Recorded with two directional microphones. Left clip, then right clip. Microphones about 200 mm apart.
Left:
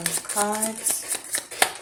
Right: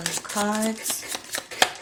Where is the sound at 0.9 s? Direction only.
15° right (ahead or behind).